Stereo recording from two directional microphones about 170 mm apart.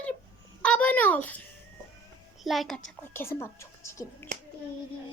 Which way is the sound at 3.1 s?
15° left (ahead or behind).